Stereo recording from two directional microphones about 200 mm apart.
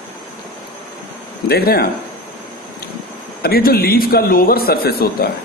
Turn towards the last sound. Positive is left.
turn(degrees=50)  # may be behind; listen again after turning